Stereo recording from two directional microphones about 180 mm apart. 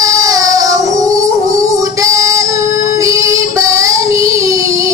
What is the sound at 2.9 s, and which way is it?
Child singing, 15° right (ahead or behind).